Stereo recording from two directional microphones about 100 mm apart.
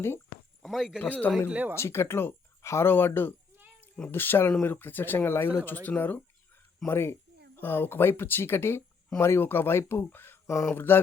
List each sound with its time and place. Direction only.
0.6 s a sound: centre (ahead or behind)
0.9 s speech: 15° left (ahead or behind)
1.5 s speech: 15° right (ahead or behind)
1.7 s speech: 25° left (ahead or behind)